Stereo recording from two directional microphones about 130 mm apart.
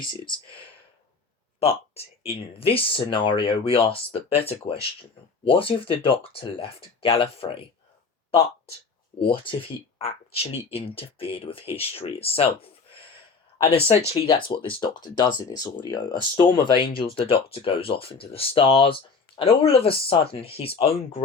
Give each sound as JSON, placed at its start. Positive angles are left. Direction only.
{"t": 1.5, "sound": "speech", "side_deg": 50}
{"t": 9.1, "sound": "speech", "side_deg": 45}
{"t": 13.8, "sound": "speech", "side_deg": 45}